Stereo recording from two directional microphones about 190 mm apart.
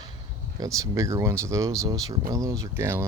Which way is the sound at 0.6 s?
15° right (ahead or behind).